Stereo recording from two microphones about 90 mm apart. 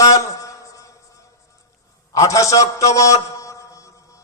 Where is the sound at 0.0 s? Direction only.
35° left (ahead or behind).